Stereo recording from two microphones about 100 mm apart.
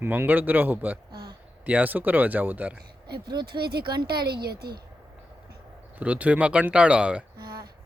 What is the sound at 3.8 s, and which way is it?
Speech, 50° right (ahead or behind).